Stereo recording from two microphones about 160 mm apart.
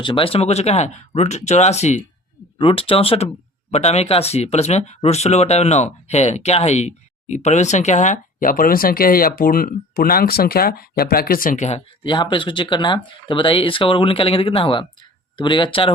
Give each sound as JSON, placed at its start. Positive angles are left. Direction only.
{"t": 0.0, "sound": "speech", "side_deg": 30}
{"t": 2.6, "sound": "speech", "side_deg": 35}
{"t": 12.0, "sound": "speech", "side_deg": 30}